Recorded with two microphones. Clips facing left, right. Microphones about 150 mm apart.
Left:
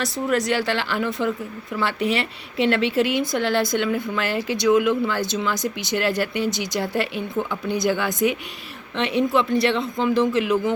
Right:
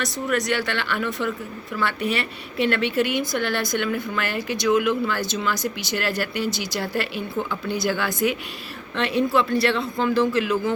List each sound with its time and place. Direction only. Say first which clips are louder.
0.0 s speech: left 2 dB; 30° left (ahead or behind)